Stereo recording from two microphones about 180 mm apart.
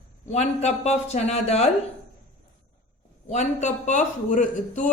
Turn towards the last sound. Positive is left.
turn(degrees=45)  # may be behind; listen again after turning